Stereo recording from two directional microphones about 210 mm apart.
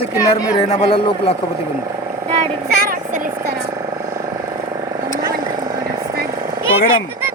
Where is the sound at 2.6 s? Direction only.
45° right (ahead or behind).